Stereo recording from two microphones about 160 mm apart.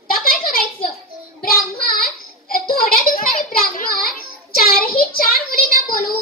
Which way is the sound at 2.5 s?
65° left (ahead or behind).